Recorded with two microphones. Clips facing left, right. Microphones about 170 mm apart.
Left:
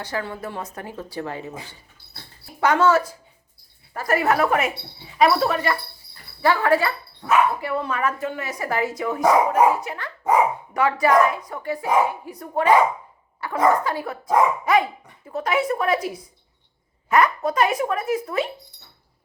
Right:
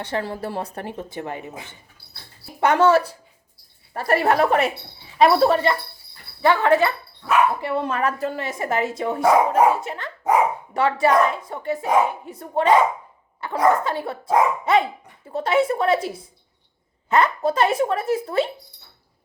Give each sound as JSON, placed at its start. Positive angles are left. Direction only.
{"t": 0.0, "sound": "a woman's voice", "side_deg": -30}
{"t": 6.4, "sound": "speech", "side_deg": -20}
{"t": 7.2, "sound": "speech", "side_deg": 40}
{"t": 7.8, "sound": "speech", "side_deg": -35}